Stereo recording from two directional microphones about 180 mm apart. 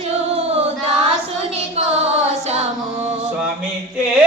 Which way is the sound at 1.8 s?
35° right (ahead or behind).